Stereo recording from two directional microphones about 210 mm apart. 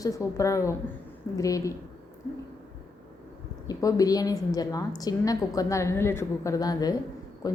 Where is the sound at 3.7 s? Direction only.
15° left (ahead or behind).